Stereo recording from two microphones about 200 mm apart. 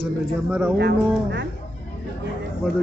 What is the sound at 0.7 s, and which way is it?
Speech, 55° right (ahead or behind).